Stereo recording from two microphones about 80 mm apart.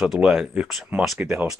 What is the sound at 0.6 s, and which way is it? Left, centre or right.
Speech, centre.